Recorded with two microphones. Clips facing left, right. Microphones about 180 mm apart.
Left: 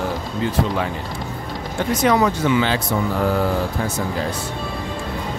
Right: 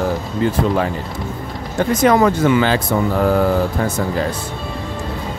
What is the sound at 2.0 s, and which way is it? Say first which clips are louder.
Speech: right 4 dB; 50° right (ahead or behind).